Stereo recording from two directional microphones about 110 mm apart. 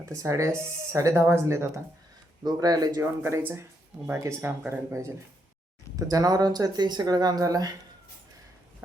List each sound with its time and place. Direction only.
0.2 s speech: 30° right (ahead or behind)
2.4 s speech: 35° right (ahead or behind)
3.0 s speech: 20° right (ahead or behind)